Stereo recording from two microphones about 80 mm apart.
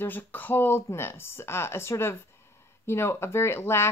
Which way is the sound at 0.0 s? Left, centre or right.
Left.